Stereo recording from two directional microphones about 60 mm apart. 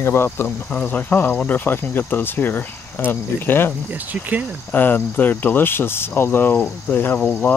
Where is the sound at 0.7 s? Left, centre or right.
Left.